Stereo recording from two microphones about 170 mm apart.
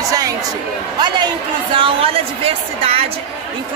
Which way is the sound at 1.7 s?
30° right (ahead or behind).